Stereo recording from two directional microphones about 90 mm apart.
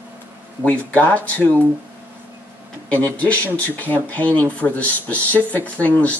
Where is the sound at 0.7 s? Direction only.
15° left (ahead or behind).